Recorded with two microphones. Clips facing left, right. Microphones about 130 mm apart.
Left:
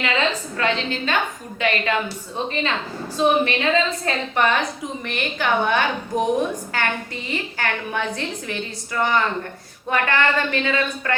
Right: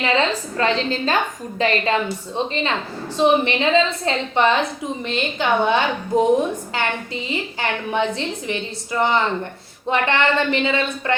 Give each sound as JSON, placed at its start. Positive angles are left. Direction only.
{"t": 0.0, "sound": "a woman's voice", "side_deg": -30}